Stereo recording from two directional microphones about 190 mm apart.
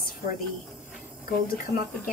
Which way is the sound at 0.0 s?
50° left (ahead or behind).